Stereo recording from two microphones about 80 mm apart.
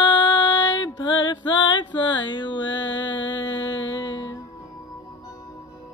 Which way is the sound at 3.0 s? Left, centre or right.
Left.